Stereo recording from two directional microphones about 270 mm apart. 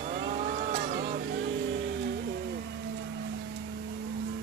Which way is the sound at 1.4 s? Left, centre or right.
Right.